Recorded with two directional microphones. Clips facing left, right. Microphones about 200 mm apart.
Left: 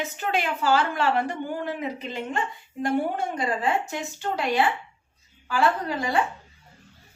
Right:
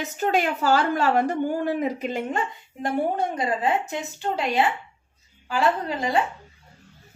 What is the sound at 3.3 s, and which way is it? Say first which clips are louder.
A woman's voice: right 1 dB; 20° right (ahead or behind).